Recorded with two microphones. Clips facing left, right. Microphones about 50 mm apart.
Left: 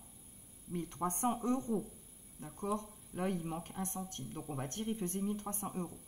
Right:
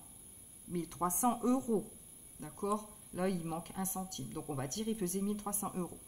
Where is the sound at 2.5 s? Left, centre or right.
Left.